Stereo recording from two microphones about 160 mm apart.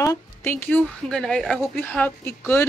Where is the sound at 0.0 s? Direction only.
20° left (ahead or behind).